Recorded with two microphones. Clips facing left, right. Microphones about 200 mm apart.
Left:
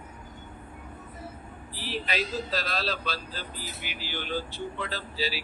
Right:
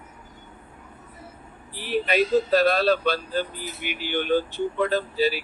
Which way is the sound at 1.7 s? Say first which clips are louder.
Right 9 dB; 60° right (ahead or behind).